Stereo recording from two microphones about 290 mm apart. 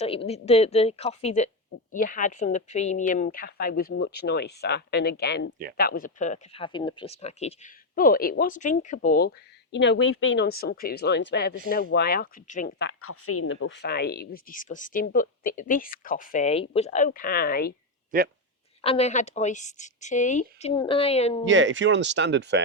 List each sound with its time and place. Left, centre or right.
0.0 s a woman's voice: centre
13.0 s a woman's voice: left
18.1 s speech: right
18.8 s speech: left
21.4 s speech: right